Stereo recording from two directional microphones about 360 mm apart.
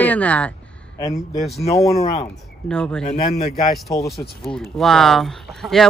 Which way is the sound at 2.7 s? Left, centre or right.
Centre.